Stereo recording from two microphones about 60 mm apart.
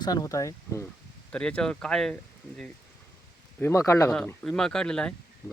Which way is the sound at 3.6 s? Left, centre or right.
Left.